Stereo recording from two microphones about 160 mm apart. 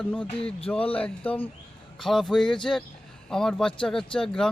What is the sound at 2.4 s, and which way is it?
Speech, 30° left (ahead or behind).